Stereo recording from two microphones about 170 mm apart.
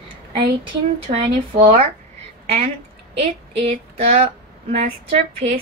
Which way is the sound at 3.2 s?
40° right (ahead or behind).